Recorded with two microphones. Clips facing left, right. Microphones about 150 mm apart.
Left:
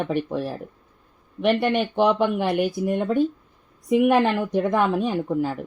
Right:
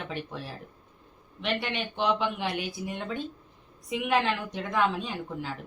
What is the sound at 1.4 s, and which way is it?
Speech, 50° left (ahead or behind).